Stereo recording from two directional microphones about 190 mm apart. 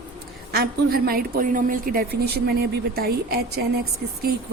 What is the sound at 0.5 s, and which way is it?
A woman's voice, 50° right (ahead or behind).